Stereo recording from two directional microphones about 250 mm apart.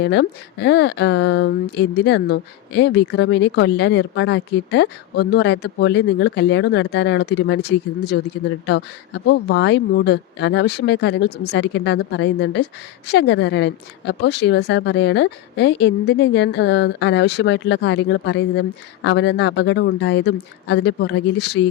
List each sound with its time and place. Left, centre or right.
0.0 s speech: left